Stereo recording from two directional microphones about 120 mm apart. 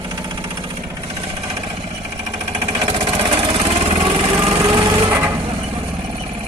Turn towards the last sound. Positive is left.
turn(degrees=-20)  # may be behind; listen again after turning